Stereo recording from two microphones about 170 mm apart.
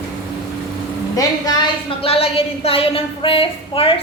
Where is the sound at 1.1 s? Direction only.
20° left (ahead or behind).